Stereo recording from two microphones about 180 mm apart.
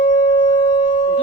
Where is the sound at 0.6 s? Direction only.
25° left (ahead or behind).